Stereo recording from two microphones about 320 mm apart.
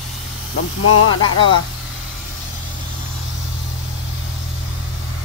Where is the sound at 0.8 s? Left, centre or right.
Left.